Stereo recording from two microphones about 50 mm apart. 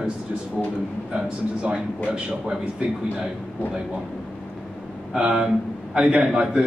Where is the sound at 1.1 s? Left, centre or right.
Centre.